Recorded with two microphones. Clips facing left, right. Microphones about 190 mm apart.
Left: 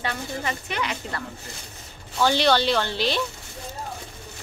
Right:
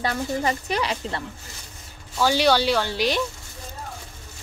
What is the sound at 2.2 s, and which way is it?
Speech, 10° right (ahead or behind).